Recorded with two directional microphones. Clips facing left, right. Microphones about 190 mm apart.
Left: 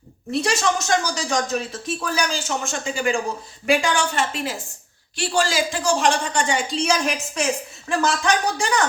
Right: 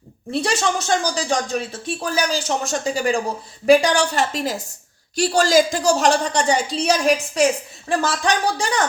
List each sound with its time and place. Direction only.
0.3 s a woman's voice: 30° right (ahead or behind)